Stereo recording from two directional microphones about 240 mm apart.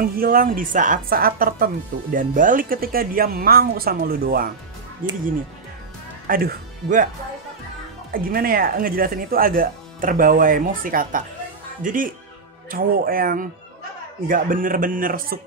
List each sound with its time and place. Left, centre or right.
0.0 s speech: right
6.2 s speech: right
8.1 s speech: right